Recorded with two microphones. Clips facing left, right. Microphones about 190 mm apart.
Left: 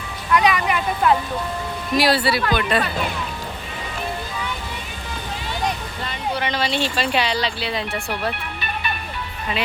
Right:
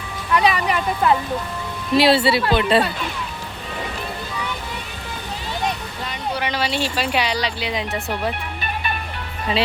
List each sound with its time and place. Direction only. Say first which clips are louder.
0.3 s a sound: even; 30° right (ahead or behind)
2.0 s speech: right 3 dB; 25° right (ahead or behind)
6.1 s speech: even; 10° right (ahead or behind)